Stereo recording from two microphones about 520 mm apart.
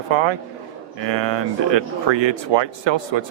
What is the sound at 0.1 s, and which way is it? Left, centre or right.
Speech, right.